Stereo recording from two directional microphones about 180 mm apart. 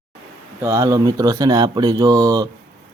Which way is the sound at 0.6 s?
15° right (ahead or behind).